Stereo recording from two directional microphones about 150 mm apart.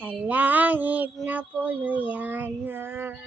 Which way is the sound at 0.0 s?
10° right (ahead or behind).